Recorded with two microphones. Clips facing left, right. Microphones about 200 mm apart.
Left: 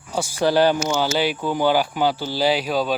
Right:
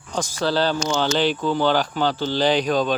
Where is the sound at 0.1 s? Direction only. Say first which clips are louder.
Left 3 dB; 10° left (ahead or behind).